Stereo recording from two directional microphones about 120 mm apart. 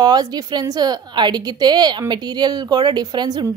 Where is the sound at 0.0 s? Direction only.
35° right (ahead or behind).